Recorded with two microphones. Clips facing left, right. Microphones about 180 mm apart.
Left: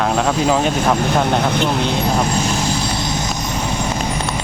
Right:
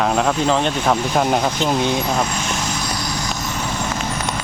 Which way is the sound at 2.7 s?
30° left (ahead or behind).